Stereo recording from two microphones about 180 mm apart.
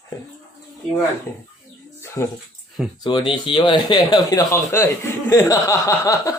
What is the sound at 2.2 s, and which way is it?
Speech, 15° left (ahead or behind).